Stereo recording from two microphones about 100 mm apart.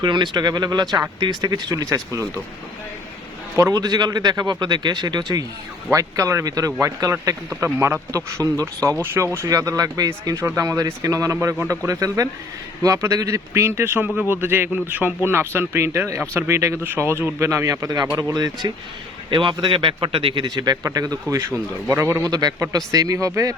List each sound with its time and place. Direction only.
0.0 s a man's voice: 50° right (ahead or behind)
3.5 s a man's voice: 35° right (ahead or behind)
19.3 s a man's voice: 55° right (ahead or behind); by 22.3 s 25° right (ahead or behind)
22.3 s a man's voice: 40° right (ahead or behind)